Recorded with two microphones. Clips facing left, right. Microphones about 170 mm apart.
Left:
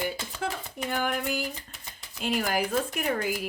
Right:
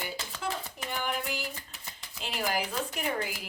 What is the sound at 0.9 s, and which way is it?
Speech, 50° left (ahead or behind).